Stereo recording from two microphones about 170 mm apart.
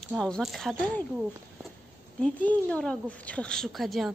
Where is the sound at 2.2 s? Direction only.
5° left (ahead or behind).